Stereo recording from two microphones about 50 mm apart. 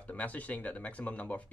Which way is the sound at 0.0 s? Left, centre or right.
Left.